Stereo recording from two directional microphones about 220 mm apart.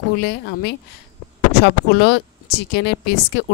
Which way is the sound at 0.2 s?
50° left (ahead or behind).